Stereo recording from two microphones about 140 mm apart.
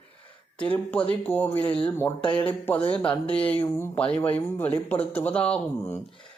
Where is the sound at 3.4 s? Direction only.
10° left (ahead or behind).